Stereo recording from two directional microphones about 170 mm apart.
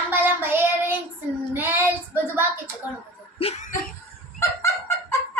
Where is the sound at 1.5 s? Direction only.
10° right (ahead or behind).